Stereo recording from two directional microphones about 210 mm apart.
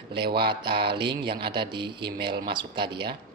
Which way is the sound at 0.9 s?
20° right (ahead or behind).